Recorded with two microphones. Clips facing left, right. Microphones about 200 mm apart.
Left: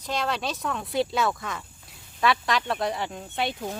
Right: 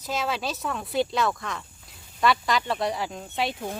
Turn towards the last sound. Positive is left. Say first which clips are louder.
# even
turn(degrees=0)  # may be behind; listen again after turning